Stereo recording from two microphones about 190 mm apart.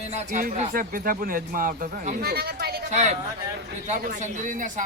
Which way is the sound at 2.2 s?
55° right (ahead or behind).